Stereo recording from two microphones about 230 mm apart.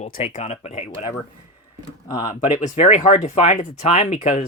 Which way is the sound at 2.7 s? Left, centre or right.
Left.